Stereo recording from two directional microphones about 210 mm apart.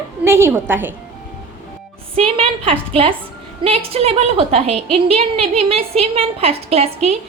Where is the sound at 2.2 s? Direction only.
25° right (ahead or behind).